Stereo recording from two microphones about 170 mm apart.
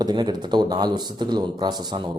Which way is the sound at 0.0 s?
25° right (ahead or behind).